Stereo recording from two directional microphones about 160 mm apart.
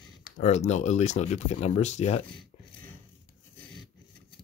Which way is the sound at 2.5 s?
40° left (ahead or behind).